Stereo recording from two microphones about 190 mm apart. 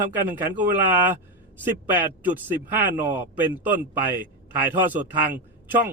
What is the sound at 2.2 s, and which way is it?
Speech, 10° right (ahead or behind).